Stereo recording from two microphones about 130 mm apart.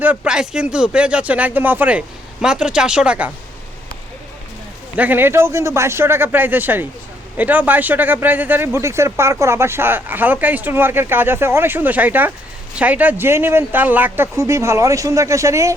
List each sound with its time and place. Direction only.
0.0 s speech: 10° right (ahead or behind)
4.9 s speech: 15° right (ahead or behind)